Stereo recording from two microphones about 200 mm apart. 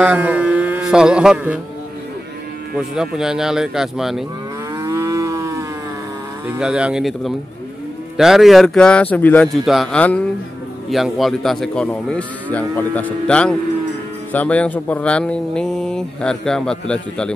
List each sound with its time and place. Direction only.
0.0 s a sound: 5° right (ahead or behind)
2.7 s speech: 5° right (ahead or behind)
4.7 s moo: 15° right (ahead or behind)
6.4 s speech: 5° right (ahead or behind)